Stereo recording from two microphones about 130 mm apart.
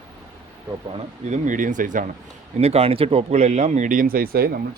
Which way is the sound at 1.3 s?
85° right.